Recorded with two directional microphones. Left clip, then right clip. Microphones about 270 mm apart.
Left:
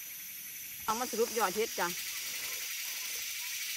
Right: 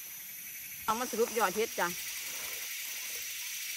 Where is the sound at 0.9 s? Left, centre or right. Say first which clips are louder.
Right 1 dB; centre.